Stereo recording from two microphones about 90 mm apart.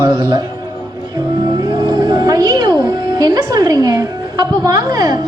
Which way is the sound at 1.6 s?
45° right (ahead or behind).